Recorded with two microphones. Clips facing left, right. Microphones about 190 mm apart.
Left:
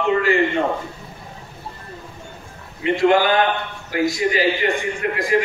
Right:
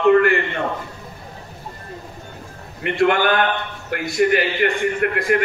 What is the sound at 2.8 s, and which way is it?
A man's voice, 60° right (ahead or behind).